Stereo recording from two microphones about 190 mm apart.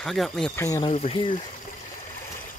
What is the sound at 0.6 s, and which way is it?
Speech, 15° left (ahead or behind).